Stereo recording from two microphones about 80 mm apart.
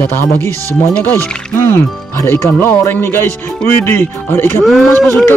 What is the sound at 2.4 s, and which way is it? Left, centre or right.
Speech, left.